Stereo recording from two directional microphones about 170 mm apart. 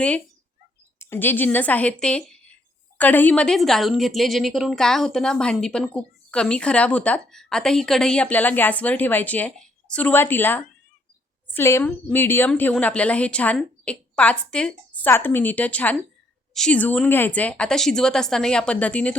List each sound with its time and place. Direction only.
0.9 s a woman's voice: 15° left (ahead or behind)